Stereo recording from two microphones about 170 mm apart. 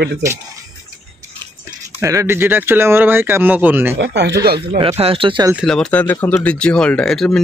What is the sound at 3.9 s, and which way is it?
Speech, 90° right.